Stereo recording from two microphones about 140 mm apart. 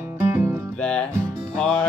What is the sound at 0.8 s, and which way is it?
Music, 10° left (ahead or behind).